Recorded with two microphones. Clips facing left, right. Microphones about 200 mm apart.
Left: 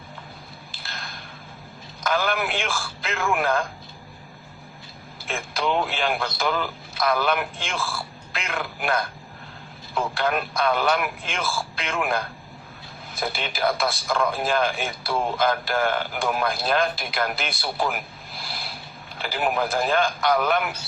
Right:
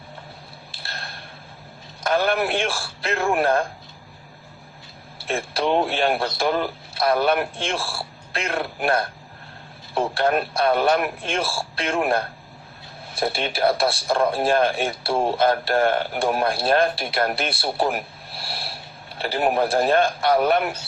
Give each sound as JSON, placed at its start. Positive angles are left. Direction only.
{"t": 2.0, "sound": "a man's voice", "side_deg": -30}
{"t": 5.7, "sound": "a man's voice", "side_deg": -40}